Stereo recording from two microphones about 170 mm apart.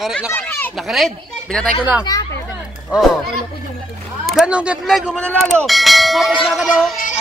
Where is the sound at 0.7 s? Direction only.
Centre (ahead or behind).